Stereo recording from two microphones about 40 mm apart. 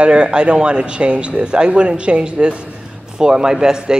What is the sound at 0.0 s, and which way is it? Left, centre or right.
A man's voice, right.